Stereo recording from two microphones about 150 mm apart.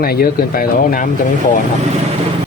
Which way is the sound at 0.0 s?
90° left.